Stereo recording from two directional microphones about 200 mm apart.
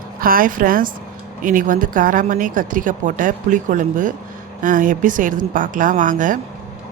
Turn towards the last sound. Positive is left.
turn(degrees=-40)  # may be behind; listen again after turning